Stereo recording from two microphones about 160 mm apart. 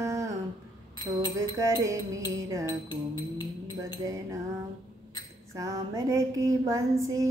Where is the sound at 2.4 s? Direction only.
20° right (ahead or behind).